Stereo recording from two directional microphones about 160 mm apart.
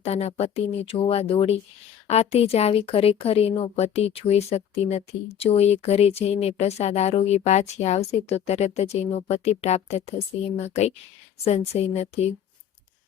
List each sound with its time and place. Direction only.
0.0 s speech: 40° left (ahead or behind)
11.4 s speech: 40° left (ahead or behind)